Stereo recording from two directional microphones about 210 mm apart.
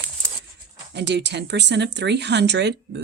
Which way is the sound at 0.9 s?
55° right (ahead or behind).